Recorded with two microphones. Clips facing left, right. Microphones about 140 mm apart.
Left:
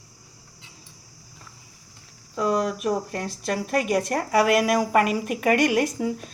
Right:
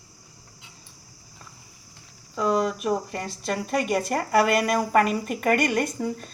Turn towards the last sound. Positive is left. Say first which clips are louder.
# left 3 dB
turn(degrees=5)  # may be behind; listen again after turning